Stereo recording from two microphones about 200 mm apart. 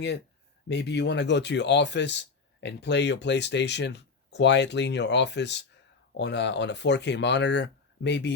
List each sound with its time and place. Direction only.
0.7 s speech: 60° left (ahead or behind)